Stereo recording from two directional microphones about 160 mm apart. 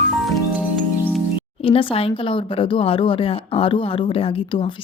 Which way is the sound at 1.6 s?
35° left (ahead or behind).